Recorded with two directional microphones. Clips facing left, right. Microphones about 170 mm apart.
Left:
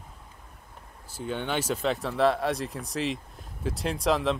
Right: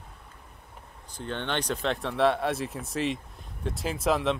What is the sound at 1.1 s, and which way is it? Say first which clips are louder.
Speech: left 1 dB; 5° left (ahead or behind).